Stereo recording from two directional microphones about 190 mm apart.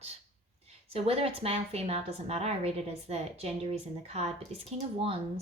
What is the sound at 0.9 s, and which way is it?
A woman's voice, 30° right (ahead or behind).